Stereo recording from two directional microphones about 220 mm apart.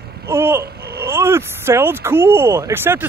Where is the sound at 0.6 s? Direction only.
45° right (ahead or behind).